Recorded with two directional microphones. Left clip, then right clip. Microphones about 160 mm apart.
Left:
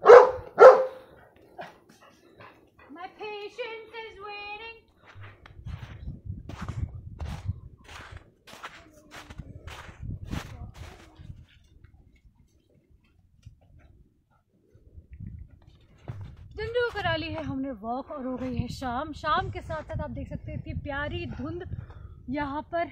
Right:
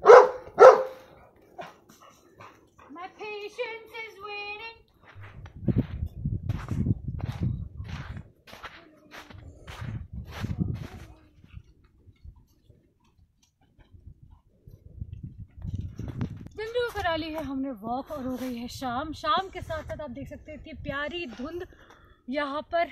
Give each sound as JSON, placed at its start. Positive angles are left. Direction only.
{"t": 0.0, "sound": "dog", "side_deg": 15}
{"t": 5.0, "sound": "a sound", "side_deg": 15}
{"t": 16.0, "sound": "clip-clop", "side_deg": 0}
{"t": 18.0, "sound": "speech", "side_deg": 0}
{"t": 21.3, "sound": "speech", "side_deg": -30}
{"t": 22.3, "sound": "a woman's voice", "side_deg": -45}